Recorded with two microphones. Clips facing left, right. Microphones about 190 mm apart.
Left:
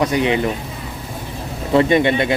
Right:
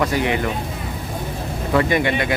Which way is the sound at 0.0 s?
20° left (ahead or behind).